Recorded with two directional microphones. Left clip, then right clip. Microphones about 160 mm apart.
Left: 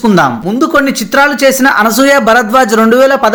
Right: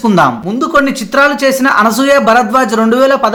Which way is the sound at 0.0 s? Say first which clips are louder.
Left 1 dB; 25° left (ahead or behind).